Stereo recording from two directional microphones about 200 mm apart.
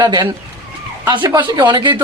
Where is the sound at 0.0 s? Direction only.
20° right (ahead or behind).